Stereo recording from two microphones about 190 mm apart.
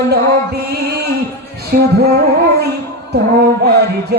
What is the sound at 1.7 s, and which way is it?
Music, 60° right (ahead or behind).